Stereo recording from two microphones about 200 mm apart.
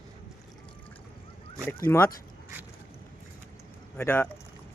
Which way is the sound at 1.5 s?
10° left (ahead or behind).